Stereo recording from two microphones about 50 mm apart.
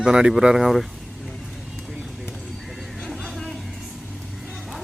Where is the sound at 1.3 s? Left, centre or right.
Centre.